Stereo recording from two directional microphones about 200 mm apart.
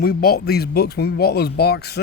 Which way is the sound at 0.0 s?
50° left (ahead or behind).